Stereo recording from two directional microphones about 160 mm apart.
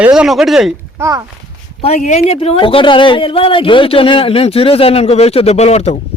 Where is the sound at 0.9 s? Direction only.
15° right (ahead or behind).